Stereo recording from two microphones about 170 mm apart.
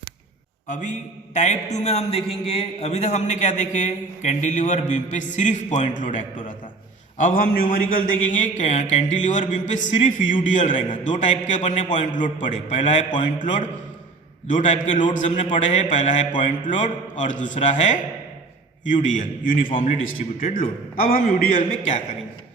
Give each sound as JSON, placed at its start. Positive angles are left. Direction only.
{"t": 0.7, "sound": "a man's voice", "side_deg": 45}